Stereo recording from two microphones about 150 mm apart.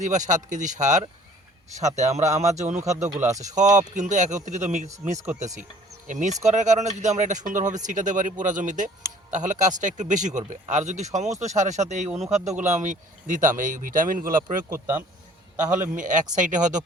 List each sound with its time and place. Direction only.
0.0 s speech: 55° right (ahead or behind)
14.7 s speech: 15° right (ahead or behind)
16.0 s speech: 60° right (ahead or behind)